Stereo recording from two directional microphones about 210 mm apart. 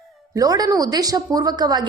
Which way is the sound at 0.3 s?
15° right (ahead or behind).